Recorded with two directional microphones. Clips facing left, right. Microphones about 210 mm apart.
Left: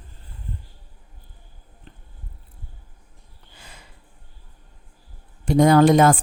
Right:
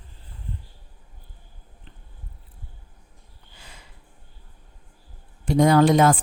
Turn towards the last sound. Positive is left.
turn(degrees=50)  # may be behind; listen again after turning